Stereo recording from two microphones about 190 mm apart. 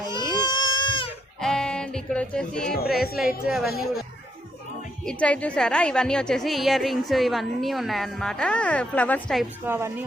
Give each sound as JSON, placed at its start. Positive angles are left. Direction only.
{"t": 0.0, "sound": "goat", "side_deg": 20}
{"t": 1.4, "sound": "music", "side_deg": 5}
{"t": 3.4, "sound": "a woman's voice", "side_deg": 0}
{"t": 5.0, "sound": "a woman's voice", "side_deg": 5}
{"t": 9.6, "sound": "speech", "side_deg": -10}